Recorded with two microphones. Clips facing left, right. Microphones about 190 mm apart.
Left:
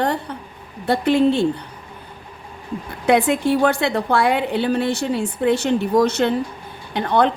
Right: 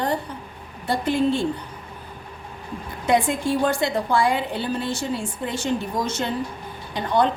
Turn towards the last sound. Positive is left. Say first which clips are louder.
# left 3 dB
turn(degrees=65)  # may be behind; listen again after turning